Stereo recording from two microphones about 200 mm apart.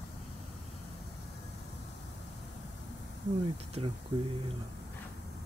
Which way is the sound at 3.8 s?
25° right (ahead or behind).